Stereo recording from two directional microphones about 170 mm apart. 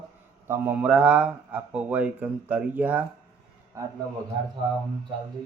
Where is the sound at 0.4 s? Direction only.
15° right (ahead or behind).